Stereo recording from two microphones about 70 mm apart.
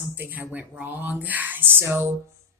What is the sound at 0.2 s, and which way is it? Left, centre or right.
Mantra, right.